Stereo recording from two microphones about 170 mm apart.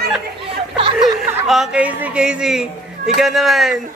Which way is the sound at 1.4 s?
Centre (ahead or behind).